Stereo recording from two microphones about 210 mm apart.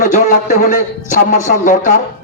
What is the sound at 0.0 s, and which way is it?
A man's voice, 35° left (ahead or behind).